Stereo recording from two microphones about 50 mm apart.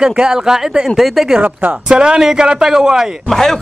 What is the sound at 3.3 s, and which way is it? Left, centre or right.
Speech, centre.